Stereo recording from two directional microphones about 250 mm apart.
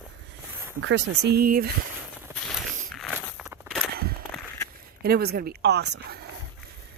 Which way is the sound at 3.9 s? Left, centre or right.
Right.